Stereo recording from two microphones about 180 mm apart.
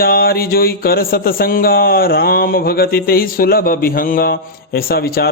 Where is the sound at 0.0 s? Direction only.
55° left (ahead or behind).